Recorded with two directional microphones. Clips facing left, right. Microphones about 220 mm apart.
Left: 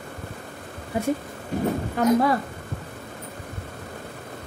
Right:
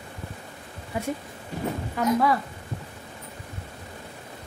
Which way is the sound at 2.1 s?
45° left (ahead or behind).